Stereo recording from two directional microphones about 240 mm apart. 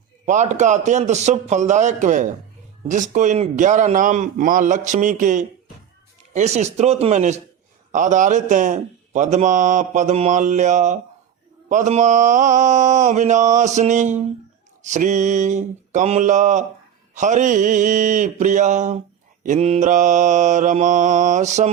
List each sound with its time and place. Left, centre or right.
0.3 s mantra: right
6.3 s speech: right
7.9 s mantra: right